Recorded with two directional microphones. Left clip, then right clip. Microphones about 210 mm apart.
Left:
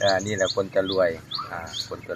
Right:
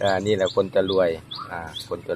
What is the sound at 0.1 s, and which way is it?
Speech, 45° right (ahead or behind).